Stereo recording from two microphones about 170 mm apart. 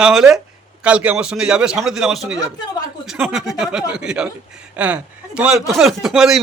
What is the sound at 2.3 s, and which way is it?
Speech, 20° left (ahead or behind).